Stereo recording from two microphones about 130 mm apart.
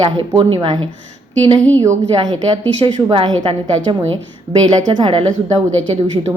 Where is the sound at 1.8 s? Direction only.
25° right (ahead or behind).